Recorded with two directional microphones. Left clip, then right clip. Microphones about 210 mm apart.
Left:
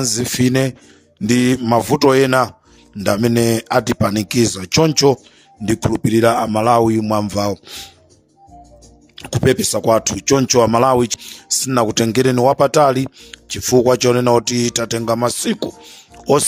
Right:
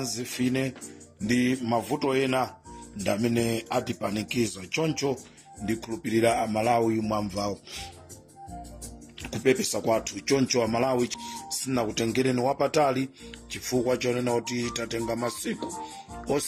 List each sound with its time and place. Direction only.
0.0 s speech: 55° left (ahead or behind)
9.2 s speech: 55° left (ahead or behind)